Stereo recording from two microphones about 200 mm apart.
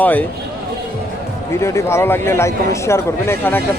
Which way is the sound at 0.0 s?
10° left (ahead or behind).